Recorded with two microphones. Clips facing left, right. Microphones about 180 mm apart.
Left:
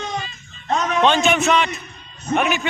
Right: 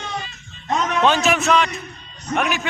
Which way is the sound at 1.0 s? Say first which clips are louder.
Left 1 dB; 5° right (ahead or behind).